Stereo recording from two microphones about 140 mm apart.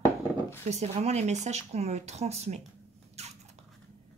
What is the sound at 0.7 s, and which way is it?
Speech, 50° right (ahead or behind).